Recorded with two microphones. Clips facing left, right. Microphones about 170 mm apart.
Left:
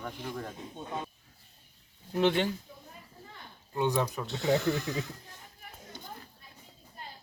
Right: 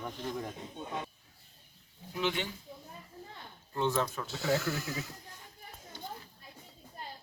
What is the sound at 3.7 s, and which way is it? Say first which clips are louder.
Speech: left 2 dB; 15° left (ahead or behind).